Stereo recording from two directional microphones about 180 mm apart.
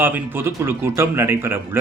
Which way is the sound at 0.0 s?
10° right (ahead or behind).